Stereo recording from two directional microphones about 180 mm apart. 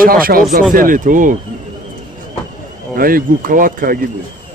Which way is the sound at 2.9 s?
55° right (ahead or behind).